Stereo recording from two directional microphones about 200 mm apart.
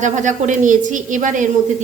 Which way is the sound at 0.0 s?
40° right (ahead or behind).